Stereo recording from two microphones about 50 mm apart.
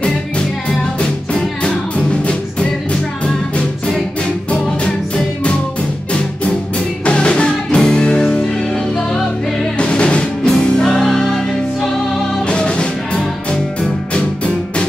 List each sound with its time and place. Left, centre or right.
3.5 s music: centre
7.1 s music: left; by 11.9 s centre
12.4 s music: centre